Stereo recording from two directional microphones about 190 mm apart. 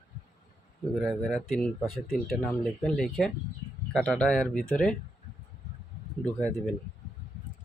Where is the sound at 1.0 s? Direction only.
Centre (ahead or behind).